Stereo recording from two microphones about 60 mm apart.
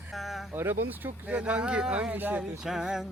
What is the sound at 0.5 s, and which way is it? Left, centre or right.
Speech, right.